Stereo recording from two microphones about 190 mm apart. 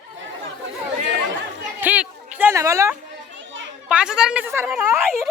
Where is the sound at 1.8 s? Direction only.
10° right (ahead or behind).